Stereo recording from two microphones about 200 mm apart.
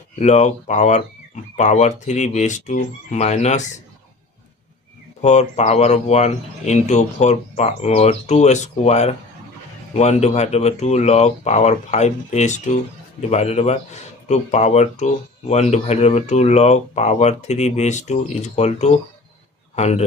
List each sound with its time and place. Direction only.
0.2 s speech: 35° left (ahead or behind)
5.2 s speech: 35° left (ahead or behind)